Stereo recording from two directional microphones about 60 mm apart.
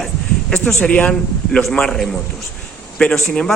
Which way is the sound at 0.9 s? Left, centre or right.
Left.